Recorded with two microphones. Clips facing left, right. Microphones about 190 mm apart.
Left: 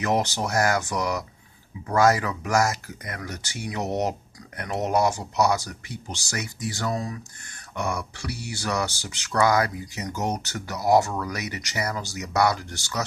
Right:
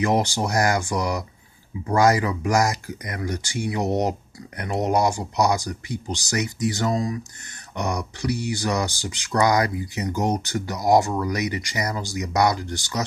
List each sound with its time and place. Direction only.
0.0 s speech: 10° right (ahead or behind)